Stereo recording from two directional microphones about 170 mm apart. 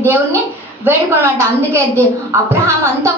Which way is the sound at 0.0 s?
15° right (ahead or behind).